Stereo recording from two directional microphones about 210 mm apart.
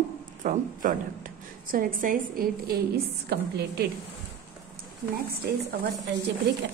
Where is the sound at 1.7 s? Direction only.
40° right (ahead or behind).